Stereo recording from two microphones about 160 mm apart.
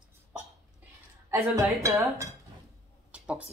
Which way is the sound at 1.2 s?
20° right (ahead or behind).